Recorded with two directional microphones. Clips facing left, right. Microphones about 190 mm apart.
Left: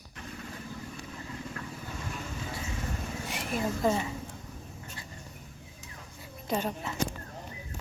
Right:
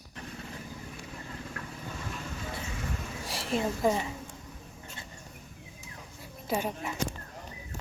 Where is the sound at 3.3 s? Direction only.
35° right (ahead or behind).